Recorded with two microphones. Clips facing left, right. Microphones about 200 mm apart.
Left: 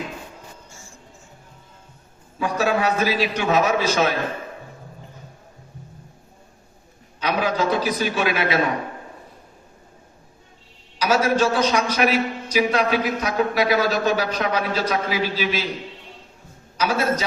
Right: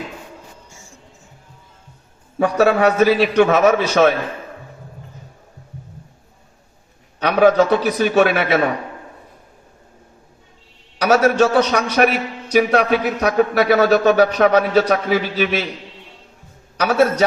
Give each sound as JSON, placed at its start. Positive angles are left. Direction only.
{"t": 2.4, "sound": "a man's voice", "side_deg": -60}
{"t": 7.2, "sound": "a man's voice", "side_deg": -60}
{"t": 10.9, "sound": "a man's voice", "side_deg": -65}
{"t": 16.7, "sound": "a man's voice", "side_deg": -65}